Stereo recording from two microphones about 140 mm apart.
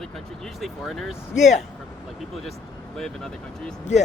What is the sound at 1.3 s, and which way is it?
Speech, 60° left (ahead or behind).